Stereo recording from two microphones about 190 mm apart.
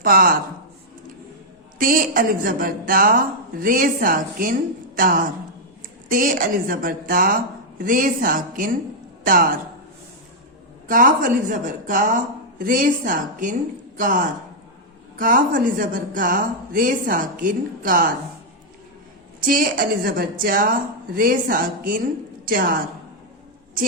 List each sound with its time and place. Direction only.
0.0 s a woman's voice: 50° right (ahead or behind)
1.8 s a woman's voice: 45° right (ahead or behind)
10.8 s a woman's voice: 45° right (ahead or behind)
19.4 s a woman's voice: 45° right (ahead or behind)